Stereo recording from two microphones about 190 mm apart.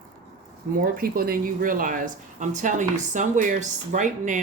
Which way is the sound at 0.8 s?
50° right (ahead or behind).